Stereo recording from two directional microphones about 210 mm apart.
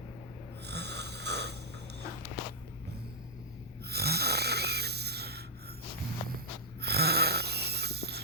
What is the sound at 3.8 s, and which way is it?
Snoring, 50° right (ahead or behind).